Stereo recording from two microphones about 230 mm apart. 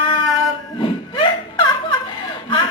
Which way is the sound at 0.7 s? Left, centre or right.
Left.